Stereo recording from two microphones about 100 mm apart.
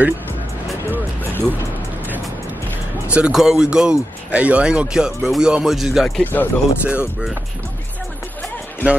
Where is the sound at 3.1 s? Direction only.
5° right (ahead or behind).